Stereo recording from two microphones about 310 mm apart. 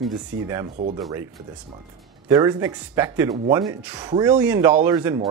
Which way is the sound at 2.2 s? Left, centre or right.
Centre.